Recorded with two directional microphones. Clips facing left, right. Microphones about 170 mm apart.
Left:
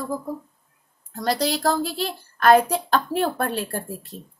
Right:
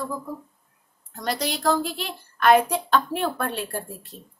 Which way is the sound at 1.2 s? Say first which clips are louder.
Left 4 dB; 35° left (ahead or behind).